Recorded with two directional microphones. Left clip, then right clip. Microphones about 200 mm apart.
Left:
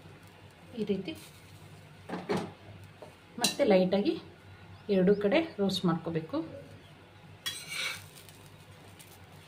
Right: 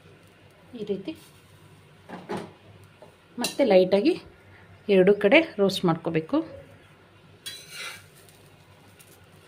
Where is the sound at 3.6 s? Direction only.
45° right (ahead or behind).